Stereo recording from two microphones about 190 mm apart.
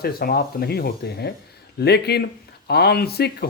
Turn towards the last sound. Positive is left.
turn(degrees=55)  # may be behind; listen again after turning